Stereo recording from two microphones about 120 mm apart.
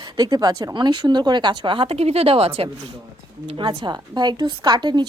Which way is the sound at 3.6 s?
40° right (ahead or behind).